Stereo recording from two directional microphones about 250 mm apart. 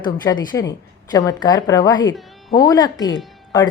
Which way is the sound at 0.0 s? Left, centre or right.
Centre.